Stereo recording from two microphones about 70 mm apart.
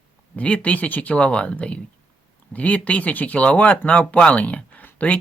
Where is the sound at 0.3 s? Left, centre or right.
Centre.